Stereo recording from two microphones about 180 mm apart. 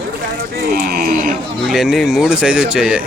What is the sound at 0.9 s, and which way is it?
Livestock, 55° right (ahead or behind).